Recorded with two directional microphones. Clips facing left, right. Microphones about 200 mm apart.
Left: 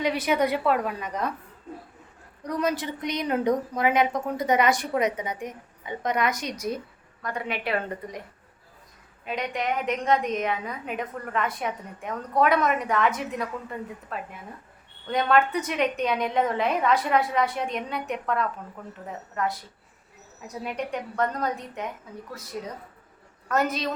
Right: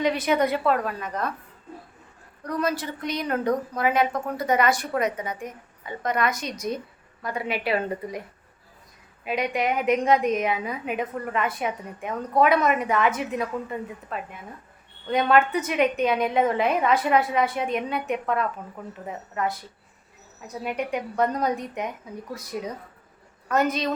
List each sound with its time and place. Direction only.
0.0 s a woman's voice: 10° left (ahead or behind)
2.4 s a woman's voice: 15° left (ahead or behind)
7.2 s a woman's voice: 5° right (ahead or behind)
9.2 s a woman's voice: 10° right (ahead or behind)
20.7 s a woman's voice: 10° right (ahead or behind)
23.5 s a woman's voice: centre (ahead or behind)